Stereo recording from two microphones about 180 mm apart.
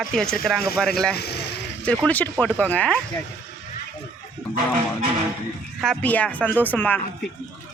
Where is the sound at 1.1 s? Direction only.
65° left (ahead or behind).